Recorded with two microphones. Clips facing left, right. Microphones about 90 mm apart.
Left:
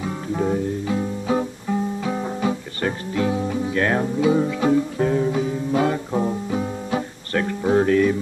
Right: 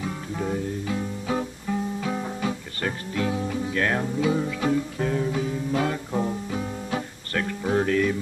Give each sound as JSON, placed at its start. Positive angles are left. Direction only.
{"t": 0.0, "sound": "music", "side_deg": 25}